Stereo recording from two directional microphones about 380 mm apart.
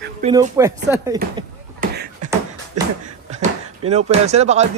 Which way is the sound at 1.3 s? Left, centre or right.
Right.